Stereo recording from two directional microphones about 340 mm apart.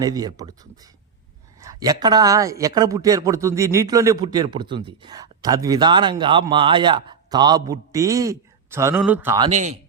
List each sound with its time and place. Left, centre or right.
0.0 s a man's voice: centre
9.5 s speech: centre